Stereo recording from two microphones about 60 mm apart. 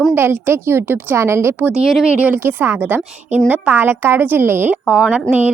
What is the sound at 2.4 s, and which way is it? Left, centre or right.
A woman's voice, right.